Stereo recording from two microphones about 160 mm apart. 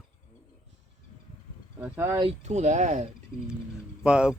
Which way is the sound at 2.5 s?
45° right (ahead or behind).